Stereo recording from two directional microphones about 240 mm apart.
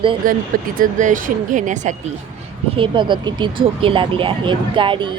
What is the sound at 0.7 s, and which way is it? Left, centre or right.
Speech, right.